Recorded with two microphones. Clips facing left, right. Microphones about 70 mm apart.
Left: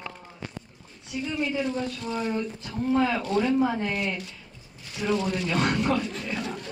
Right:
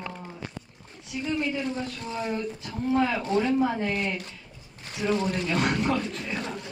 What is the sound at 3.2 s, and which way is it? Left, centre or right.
Speech, right.